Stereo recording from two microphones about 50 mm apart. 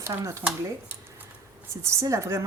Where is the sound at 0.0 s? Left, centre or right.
Right.